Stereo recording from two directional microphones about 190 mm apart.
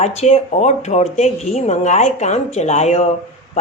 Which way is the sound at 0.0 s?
35° left (ahead or behind).